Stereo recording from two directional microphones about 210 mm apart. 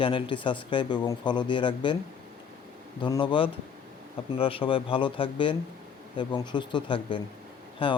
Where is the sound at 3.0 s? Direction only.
20° left (ahead or behind).